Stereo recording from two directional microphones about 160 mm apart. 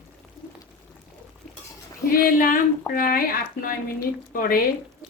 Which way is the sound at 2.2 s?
65° left (ahead or behind).